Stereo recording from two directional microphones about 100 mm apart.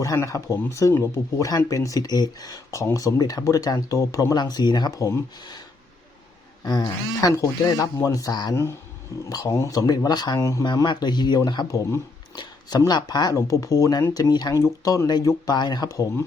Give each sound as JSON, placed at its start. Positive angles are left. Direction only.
{"t": 0.0, "sound": "speech", "side_deg": 35}
{"t": 6.7, "sound": "speech", "side_deg": 40}
{"t": 12.9, "sound": "speech", "side_deg": 45}
{"t": 13.3, "sound": "speech", "side_deg": 35}
{"t": 14.5, "sound": "speech", "side_deg": 30}